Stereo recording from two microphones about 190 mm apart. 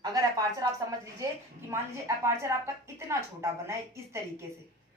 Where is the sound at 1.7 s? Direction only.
15° right (ahead or behind).